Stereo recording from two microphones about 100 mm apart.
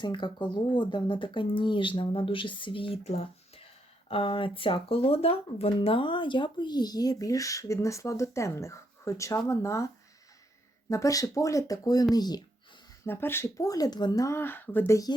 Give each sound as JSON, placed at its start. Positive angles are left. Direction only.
{"t": 0.0, "sound": "speech", "side_deg": 50}
{"t": 4.1, "sound": "speech", "side_deg": 60}
{"t": 10.8, "sound": "speech", "side_deg": 35}
{"t": 13.1, "sound": "speech", "side_deg": 25}
{"t": 14.3, "sound": "speech", "side_deg": 20}